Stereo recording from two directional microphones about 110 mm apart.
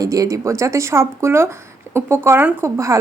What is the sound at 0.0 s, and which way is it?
Speech, 30° right (ahead or behind).